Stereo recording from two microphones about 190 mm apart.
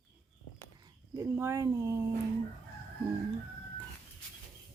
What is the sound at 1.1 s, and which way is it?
Speech, 15° right (ahead or behind).